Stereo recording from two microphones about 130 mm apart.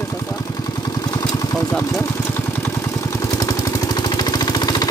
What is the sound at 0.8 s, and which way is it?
Vehicle, 30° left (ahead or behind).